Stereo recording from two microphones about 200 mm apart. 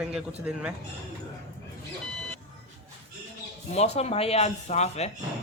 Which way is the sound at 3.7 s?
30° left (ahead or behind).